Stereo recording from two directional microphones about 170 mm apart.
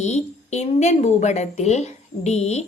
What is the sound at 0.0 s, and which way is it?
A woman's voice, 40° left (ahead or behind).